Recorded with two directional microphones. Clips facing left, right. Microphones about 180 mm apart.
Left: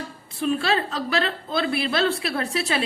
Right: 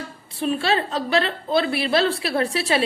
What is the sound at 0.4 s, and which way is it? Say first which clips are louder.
A woman's voice: right 1 dB; 30° right (ahead or behind).